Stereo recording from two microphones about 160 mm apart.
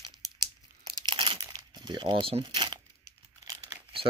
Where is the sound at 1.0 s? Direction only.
30° right (ahead or behind).